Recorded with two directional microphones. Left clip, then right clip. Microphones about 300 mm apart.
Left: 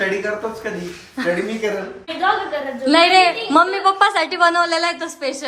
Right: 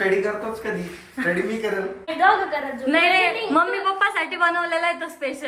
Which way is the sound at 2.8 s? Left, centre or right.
Centre.